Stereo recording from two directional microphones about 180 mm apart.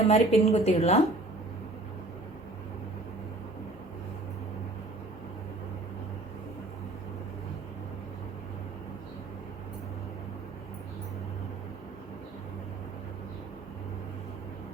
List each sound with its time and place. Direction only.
0.0 s a woman's voice: 35° left (ahead or behind)